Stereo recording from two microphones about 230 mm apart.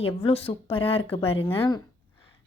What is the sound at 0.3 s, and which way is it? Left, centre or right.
A woman's voice, left.